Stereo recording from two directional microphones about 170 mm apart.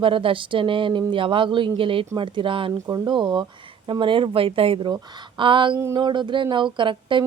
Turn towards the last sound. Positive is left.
turn(degrees=-30)  # may be behind; listen again after turning